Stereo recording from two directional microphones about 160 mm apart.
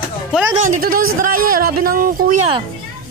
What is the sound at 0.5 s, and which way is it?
Speech, 55° right (ahead or behind).